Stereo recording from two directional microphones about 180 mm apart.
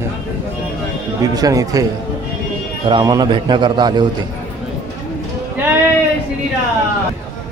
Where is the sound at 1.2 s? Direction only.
20° right (ahead or behind).